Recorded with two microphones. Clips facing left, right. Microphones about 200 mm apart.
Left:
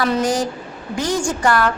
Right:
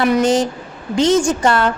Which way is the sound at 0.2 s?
25° right (ahead or behind).